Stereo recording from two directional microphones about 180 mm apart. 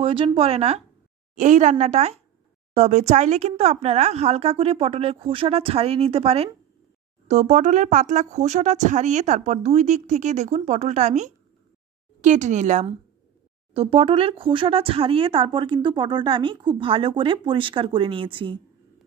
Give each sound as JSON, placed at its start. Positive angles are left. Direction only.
{"t": 0.0, "sound": "speech", "side_deg": -30}